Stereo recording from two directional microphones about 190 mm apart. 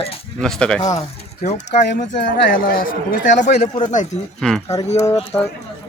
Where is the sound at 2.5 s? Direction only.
50° left (ahead or behind).